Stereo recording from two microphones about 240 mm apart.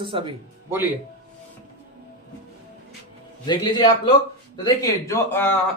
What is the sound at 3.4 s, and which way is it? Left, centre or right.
Speech, centre.